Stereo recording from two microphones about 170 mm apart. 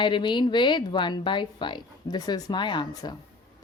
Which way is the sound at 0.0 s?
25° left (ahead or behind).